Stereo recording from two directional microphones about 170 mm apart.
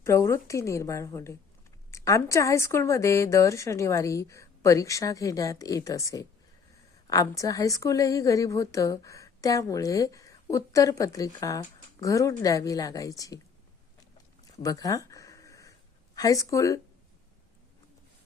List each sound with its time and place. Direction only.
0.0 s a woman's voice: 15° left (ahead or behind)
14.6 s a sound: 20° left (ahead or behind)
16.1 s a woman's voice: 20° left (ahead or behind)